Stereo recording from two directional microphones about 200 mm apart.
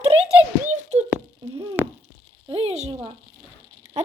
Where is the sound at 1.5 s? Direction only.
30° right (ahead or behind).